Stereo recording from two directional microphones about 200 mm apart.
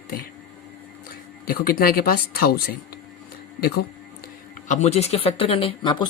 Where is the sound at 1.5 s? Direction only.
50° left (ahead or behind).